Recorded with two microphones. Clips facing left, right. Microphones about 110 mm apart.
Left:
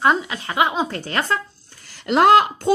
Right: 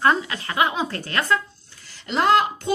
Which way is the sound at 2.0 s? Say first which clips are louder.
Left 5 dB; 60° left (ahead or behind).